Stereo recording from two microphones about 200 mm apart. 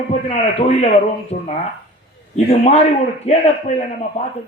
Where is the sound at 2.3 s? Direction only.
30° left (ahead or behind).